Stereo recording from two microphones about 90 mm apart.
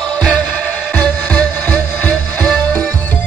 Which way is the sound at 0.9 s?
15° left (ahead or behind).